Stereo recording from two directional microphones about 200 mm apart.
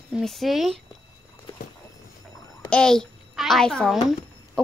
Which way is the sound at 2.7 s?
5° left (ahead or behind).